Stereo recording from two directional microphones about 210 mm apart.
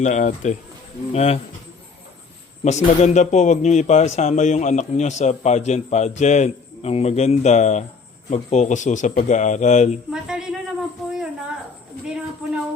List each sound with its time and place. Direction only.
0.0 s speech: 35° left (ahead or behind)
2.6 s speech: 35° left (ahead or behind)
10.1 s a sound: 5° right (ahead or behind)